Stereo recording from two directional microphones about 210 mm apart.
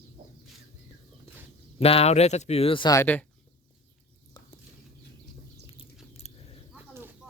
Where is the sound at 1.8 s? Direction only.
30° left (ahead or behind); by 3.2 s 10° left (ahead or behind).